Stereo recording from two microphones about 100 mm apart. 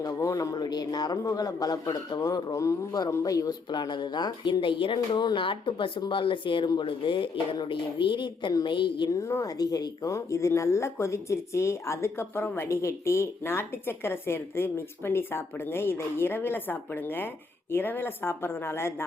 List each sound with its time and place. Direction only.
0.0 s speech: 35° left (ahead or behind)
0.5 s a woman's voice: 45° left (ahead or behind)
9.0 s speech: 30° left (ahead or behind)